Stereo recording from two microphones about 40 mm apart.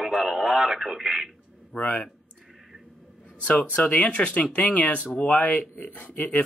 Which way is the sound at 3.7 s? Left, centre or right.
Left.